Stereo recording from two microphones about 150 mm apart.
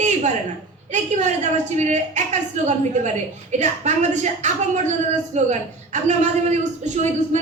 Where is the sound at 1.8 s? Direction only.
50° right (ahead or behind).